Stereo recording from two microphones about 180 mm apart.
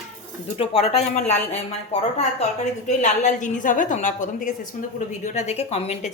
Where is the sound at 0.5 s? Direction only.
35° left (ahead or behind).